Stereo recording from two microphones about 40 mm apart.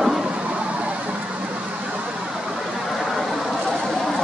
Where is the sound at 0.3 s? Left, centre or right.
Right.